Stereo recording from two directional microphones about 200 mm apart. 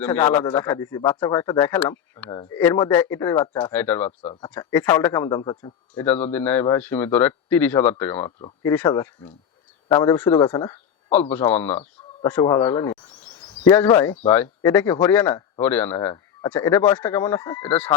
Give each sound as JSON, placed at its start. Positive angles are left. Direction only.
{"t": 0.0, "sound": "speech", "side_deg": 10}
{"t": 4.2, "sound": "speech", "side_deg": 30}
{"t": 4.6, "sound": "speech", "side_deg": 10}
{"t": 5.9, "sound": "speech", "side_deg": 10}
{"t": 8.9, "sound": "speech", "side_deg": 20}
{"t": 11.2, "sound": "speech", "side_deg": 10}